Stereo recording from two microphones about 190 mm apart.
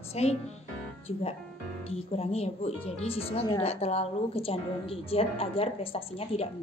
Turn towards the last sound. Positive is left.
turn(degrees=30)  # may be behind; listen again after turning